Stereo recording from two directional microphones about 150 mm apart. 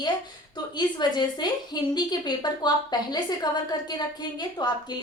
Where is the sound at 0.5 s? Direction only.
30° left (ahead or behind).